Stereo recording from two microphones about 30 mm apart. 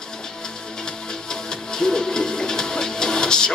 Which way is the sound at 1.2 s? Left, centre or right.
Left.